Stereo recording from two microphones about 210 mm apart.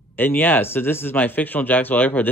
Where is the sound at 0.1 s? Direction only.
10° left (ahead or behind).